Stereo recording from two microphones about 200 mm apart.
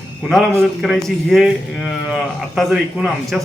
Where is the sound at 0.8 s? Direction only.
Centre (ahead or behind).